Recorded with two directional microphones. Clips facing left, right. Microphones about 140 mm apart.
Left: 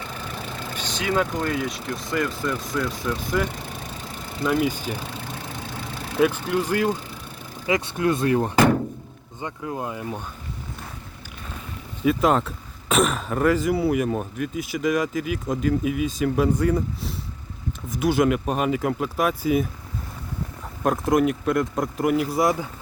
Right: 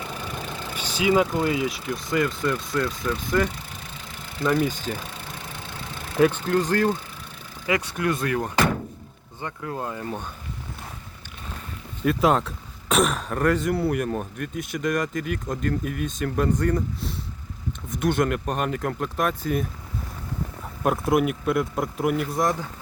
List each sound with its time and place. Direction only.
0.8 s speech: 10° right (ahead or behind); by 4.9 s 10° left (ahead or behind)
6.1 s speech: 5° left (ahead or behind)
7.7 s speech: 25° left (ahead or behind)
9.4 s speech: 15° left (ahead or behind)
12.0 s speech: centre (ahead or behind)
20.8 s speech: 5° right (ahead or behind)